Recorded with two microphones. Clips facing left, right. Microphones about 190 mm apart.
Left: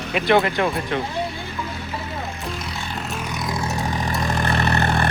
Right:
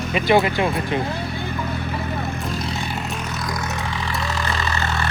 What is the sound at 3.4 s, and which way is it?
Vehicle, 25° left (ahead or behind).